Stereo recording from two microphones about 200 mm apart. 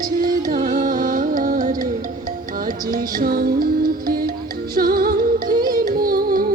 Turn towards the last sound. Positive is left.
turn(degrees=-45)  # may be behind; listen again after turning